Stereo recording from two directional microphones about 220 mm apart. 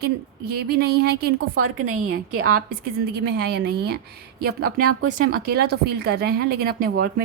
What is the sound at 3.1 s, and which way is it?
Speech, 45° right (ahead or behind).